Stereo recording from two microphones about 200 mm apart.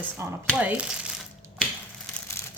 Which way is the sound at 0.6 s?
5° right (ahead or behind).